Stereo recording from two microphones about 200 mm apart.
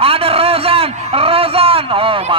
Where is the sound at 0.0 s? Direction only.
30° right (ahead or behind).